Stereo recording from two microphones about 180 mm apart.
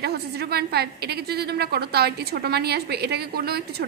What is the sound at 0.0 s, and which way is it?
A woman's voice, 60° right (ahead or behind).